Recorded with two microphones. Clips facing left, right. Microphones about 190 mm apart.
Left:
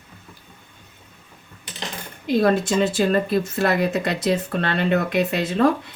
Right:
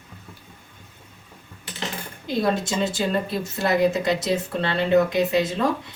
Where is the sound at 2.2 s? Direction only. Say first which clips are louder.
Left 5 dB; 60° left (ahead or behind).